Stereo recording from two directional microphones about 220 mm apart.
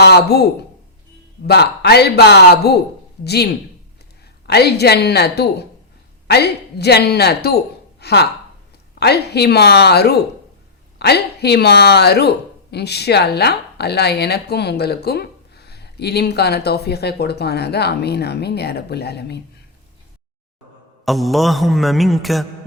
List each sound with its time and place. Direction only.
0.0 s speech: 45° left (ahead or behind)
1.5 s speech: 50° left (ahead or behind)
21.0 s mantra: centre (ahead or behind)